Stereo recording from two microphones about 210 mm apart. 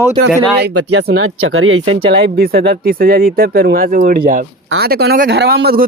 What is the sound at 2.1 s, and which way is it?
Speech, 45° right (ahead or behind).